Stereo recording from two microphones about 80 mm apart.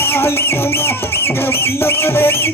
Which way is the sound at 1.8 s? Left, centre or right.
Left.